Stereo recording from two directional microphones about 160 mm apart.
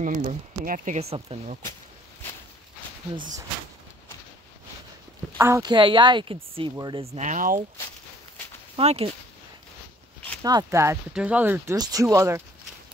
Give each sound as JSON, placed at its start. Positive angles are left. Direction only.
{"t": 0.0, "sound": "speech", "side_deg": -50}
{"t": 1.3, "sound": "speech", "side_deg": -35}
{"t": 5.4, "sound": "speech", "side_deg": -20}
{"t": 8.7, "sound": "speech", "side_deg": -40}
{"t": 10.4, "sound": "speech", "side_deg": -20}
{"t": 11.7, "sound": "speech", "side_deg": -25}